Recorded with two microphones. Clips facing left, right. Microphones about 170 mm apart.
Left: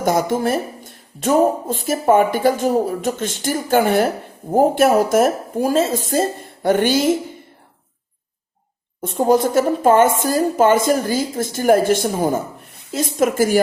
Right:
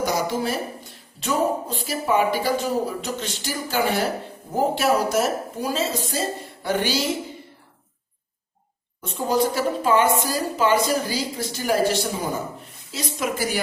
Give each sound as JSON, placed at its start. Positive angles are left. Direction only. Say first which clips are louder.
{"t": 0.0, "sound": "a woman's voice", "louder": "left 6 dB", "side_deg": 50}
{"t": 9.0, "sound": "a woman's voice", "louder": "left 6 dB", "side_deg": 50}